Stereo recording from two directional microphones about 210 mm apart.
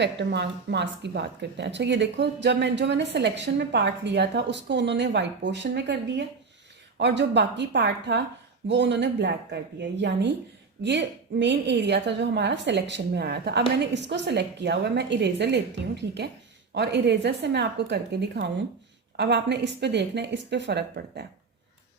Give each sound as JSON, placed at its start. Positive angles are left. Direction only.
{"t": 0.0, "sound": "a woman's voice", "side_deg": -55}